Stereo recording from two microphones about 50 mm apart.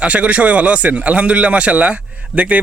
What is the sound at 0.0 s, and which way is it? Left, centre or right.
Speech, right.